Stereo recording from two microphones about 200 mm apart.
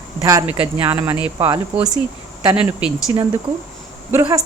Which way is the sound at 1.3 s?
25° right (ahead or behind).